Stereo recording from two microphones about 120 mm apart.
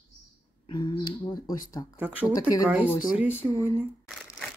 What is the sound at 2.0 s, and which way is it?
Speech, 15° right (ahead or behind).